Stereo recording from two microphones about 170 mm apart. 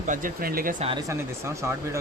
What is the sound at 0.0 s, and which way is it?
Speech, 50° right (ahead or behind).